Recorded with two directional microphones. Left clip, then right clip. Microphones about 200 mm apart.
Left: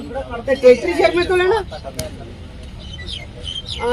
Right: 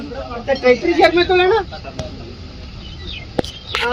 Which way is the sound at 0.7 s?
5° right (ahead or behind).